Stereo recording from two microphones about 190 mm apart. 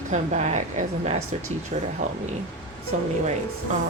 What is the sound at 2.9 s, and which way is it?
Speech, 40° right (ahead or behind).